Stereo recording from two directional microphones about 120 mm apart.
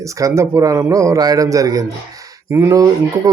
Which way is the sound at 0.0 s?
25° right (ahead or behind).